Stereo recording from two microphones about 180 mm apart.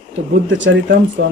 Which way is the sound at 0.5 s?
90° right.